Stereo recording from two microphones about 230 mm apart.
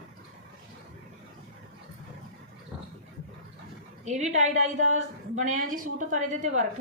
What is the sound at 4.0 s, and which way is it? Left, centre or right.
A woman's voice, right.